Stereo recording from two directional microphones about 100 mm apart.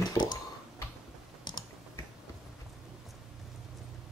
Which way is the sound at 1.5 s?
45° left (ahead or behind).